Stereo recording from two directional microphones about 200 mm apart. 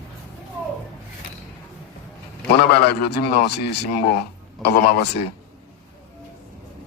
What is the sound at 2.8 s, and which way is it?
A man's voice, 55° left (ahead or behind).